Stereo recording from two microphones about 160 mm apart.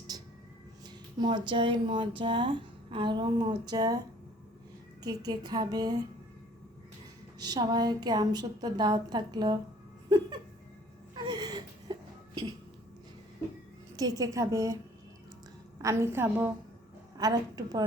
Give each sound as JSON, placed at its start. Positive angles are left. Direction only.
{"t": 0.1, "sound": "a sound", "side_deg": -25}
{"t": 1.2, "sound": "speech", "side_deg": -30}
{"t": 5.0, "sound": "a woman's voice", "side_deg": -25}
{"t": 7.3, "sound": "a woman's voice", "side_deg": -25}
{"t": 10.1, "sound": "a sound", "side_deg": -25}
{"t": 11.1, "sound": "whimper", "side_deg": -25}
{"t": 13.9, "sound": "a woman's voice", "side_deg": -20}
{"t": 15.8, "sound": "a woman's voice", "side_deg": -20}
{"t": 17.2, "sound": "a woman's voice", "side_deg": -25}